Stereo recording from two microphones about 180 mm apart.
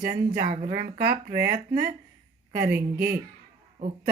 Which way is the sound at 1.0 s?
55° right (ahead or behind).